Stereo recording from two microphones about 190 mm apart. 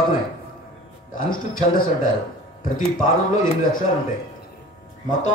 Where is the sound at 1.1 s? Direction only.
50° left (ahead or behind).